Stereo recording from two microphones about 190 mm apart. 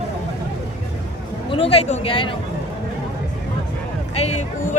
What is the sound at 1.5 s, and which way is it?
Speech, 30° left (ahead or behind).